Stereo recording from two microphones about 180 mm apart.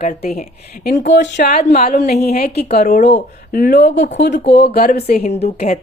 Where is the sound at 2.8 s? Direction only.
45° left (ahead or behind).